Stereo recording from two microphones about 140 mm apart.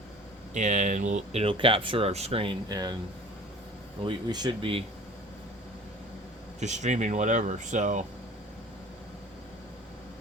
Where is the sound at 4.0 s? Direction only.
35° right (ahead or behind).